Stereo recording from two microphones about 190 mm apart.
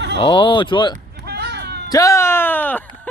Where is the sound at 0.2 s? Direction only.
25° left (ahead or behind).